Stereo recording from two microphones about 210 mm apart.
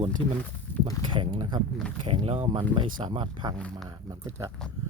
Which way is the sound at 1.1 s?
25° right (ahead or behind).